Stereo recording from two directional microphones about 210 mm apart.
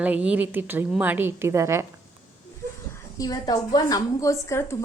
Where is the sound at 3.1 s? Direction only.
15° left (ahead or behind).